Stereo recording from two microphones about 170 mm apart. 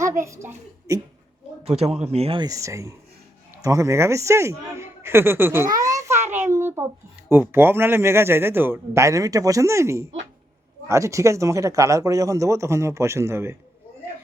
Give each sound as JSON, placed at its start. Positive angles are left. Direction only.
{"t": 0.0, "sound": "a woman's voice", "side_deg": -15}
{"t": 1.6, "sound": "speech", "side_deg": -35}
{"t": 5.7, "sound": "a sound", "side_deg": -20}
{"t": 7.3, "sound": "speech", "side_deg": -15}